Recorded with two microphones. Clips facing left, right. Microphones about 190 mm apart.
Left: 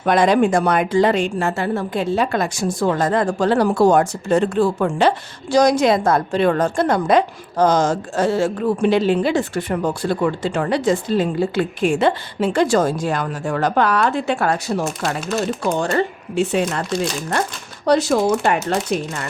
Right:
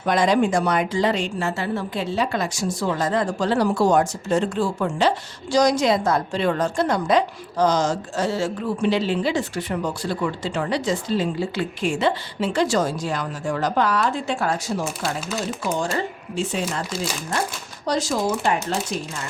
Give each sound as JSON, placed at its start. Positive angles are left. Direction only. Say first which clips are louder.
{"t": 0.0, "sound": "speech", "louder": "left 4 dB", "side_deg": 55}
{"t": 17.8, "sound": "speech", "louder": "left 7 dB", "side_deg": 65}